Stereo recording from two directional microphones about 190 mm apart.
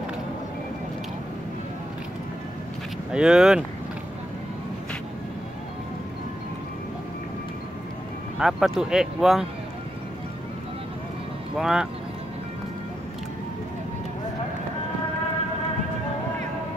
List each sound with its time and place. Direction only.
3.1 s speech: 5° right (ahead or behind)
8.4 s speech: centre (ahead or behind)
11.5 s speech: centre (ahead or behind)